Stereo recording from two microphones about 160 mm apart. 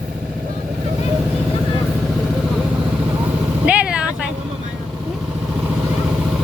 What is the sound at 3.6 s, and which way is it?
Vehicle, 5° right (ahead or behind).